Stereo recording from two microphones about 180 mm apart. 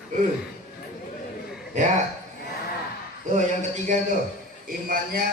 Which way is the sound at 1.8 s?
45° right (ahead or behind).